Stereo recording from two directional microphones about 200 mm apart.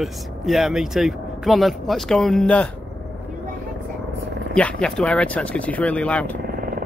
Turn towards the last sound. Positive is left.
turn(degrees=-45)  # may be behind; listen again after turning